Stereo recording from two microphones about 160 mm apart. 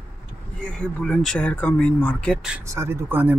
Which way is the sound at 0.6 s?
5° left (ahead or behind).